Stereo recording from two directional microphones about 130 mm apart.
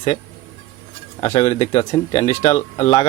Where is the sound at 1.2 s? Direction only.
50° left (ahead or behind).